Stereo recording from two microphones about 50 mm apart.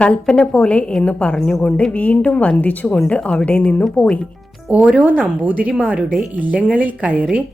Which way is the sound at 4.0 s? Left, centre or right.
Centre.